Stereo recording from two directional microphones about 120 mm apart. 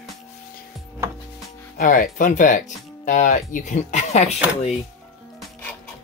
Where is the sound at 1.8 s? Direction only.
90° left; by 4.7 s 70° left (ahead or behind).